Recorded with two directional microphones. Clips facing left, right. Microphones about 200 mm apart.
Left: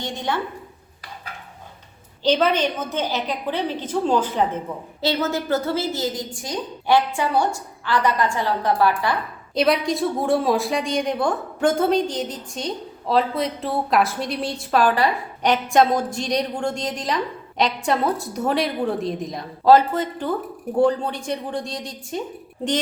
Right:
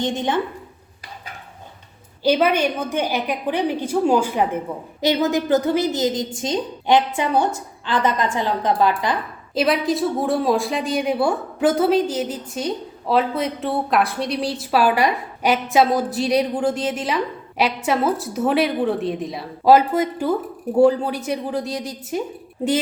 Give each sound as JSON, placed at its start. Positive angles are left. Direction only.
{"t": 0.0, "sound": "a woman's voice", "side_deg": -20}
{"t": 2.2, "sound": "a woman's voice", "side_deg": -10}
{"t": 9.6, "sound": "a woman's voice", "side_deg": 0}